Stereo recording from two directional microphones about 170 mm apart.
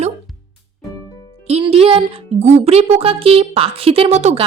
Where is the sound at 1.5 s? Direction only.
35° right (ahead or behind).